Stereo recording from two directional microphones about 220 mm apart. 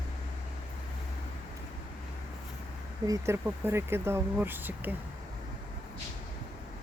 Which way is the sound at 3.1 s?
10° right (ahead or behind).